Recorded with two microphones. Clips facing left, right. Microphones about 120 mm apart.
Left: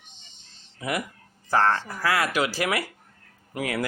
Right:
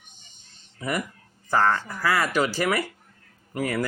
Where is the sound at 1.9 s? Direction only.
5° left (ahead or behind).